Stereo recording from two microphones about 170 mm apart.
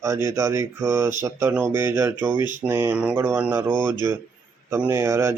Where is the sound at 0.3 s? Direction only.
15° right (ahead or behind).